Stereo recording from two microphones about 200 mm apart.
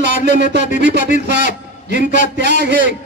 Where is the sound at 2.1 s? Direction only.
55° right (ahead or behind).